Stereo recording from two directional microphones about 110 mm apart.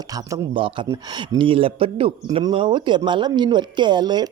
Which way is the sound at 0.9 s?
40° right (ahead or behind).